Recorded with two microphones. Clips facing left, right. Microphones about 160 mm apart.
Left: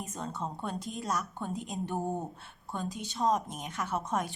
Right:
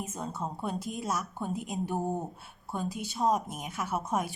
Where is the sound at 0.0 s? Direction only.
5° right (ahead or behind).